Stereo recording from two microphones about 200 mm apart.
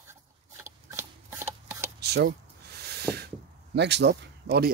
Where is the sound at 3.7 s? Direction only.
60° right (ahead or behind).